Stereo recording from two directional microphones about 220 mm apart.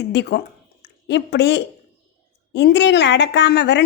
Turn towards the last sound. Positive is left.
turn(degrees=50)  # may be behind; listen again after turning